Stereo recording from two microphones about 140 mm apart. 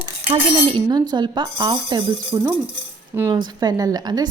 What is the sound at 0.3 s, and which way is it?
A woman's voice, 35° right (ahead or behind).